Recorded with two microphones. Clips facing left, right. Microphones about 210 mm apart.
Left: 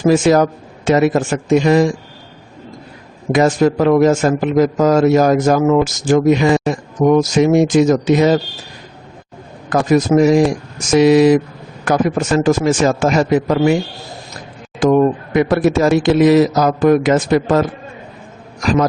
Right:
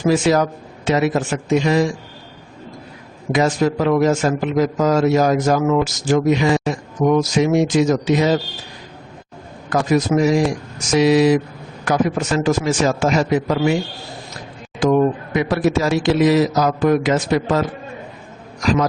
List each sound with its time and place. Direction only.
0.0 s a man's voice: 45° left (ahead or behind)
3.3 s a man's voice: 50° left (ahead or behind)
9.6 s a man's voice: 55° left (ahead or behind)
14.8 s a man's voice: 50° left (ahead or behind)